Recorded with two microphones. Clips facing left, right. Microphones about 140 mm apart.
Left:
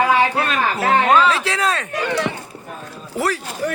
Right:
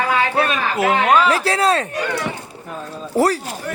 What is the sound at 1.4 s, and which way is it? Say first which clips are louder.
Speech: right 4 dB; 35° right (ahead or behind).